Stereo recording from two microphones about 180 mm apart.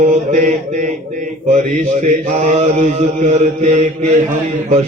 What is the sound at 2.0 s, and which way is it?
Mantra, 40° right (ahead or behind).